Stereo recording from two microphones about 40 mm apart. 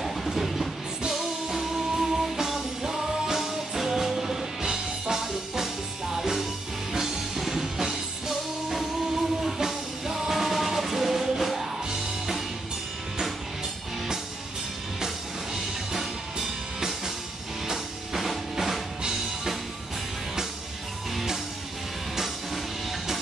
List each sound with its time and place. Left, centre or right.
0.0 s train: centre
1.0 s music: centre
15.5 s music: centre